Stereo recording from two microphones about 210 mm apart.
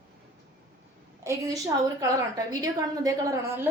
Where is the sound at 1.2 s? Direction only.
15° right (ahead or behind).